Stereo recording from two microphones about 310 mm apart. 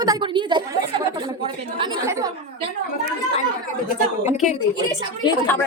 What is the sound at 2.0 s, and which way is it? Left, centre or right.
Speech, centre.